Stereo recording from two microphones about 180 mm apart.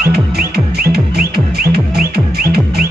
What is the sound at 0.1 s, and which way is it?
Music, 60° right (ahead or behind).